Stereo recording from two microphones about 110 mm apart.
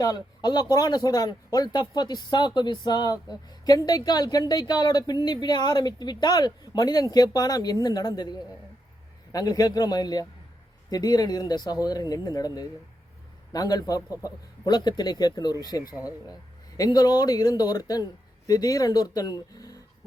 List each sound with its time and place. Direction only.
0.0 s speech: 35° left (ahead or behind)